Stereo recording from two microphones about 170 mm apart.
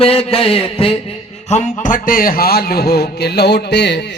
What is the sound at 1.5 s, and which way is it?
Speech, 45° left (ahead or behind).